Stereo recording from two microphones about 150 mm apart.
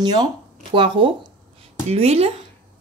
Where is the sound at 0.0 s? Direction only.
25° right (ahead or behind).